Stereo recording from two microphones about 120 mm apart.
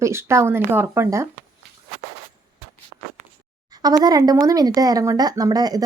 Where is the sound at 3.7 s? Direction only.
35° right (ahead or behind).